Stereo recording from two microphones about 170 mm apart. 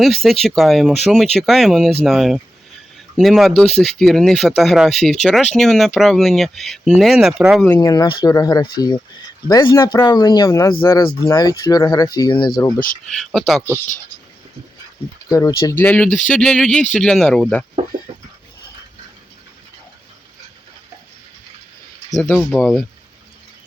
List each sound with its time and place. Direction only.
0.0 s speech: centre (ahead or behind)
7.8 s speech: 25° left (ahead or behind)
13.1 s speech: centre (ahead or behind)
15.3 s speech: 20° left (ahead or behind); by 17.7 s 5° left (ahead or behind)
22.2 s speech: 5° left (ahead or behind)